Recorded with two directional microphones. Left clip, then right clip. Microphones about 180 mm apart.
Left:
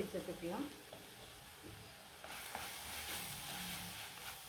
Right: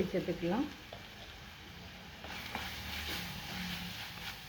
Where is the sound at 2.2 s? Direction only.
Centre (ahead or behind).